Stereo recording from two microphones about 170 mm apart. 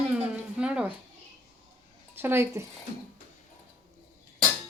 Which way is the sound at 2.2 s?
15° right (ahead or behind).